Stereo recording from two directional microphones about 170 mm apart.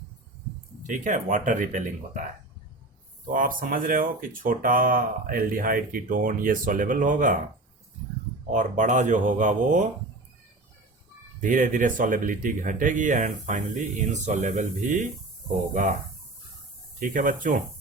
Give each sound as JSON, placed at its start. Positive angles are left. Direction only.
{"t": 0.8, "sound": "speech", "side_deg": -45}
{"t": 3.3, "sound": "speech", "side_deg": -55}
{"t": 8.5, "sound": "speech", "side_deg": -45}
{"t": 11.3, "sound": "speech", "side_deg": -50}
{"t": 17.0, "sound": "speech", "side_deg": -50}